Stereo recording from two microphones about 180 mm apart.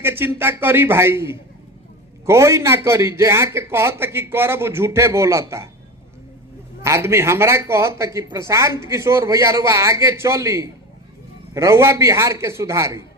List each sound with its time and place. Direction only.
0.0 s speech: 10° right (ahead or behind)
6.8 s speech: 15° right (ahead or behind)